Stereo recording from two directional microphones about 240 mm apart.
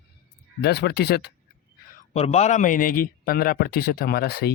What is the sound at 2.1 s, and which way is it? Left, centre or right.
Speech, left.